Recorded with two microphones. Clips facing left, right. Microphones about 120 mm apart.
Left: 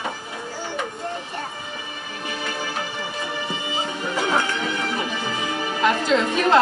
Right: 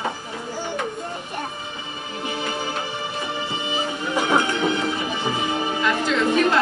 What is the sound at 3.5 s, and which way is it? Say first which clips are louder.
Music: right 1 dB; 20° right (ahead or behind).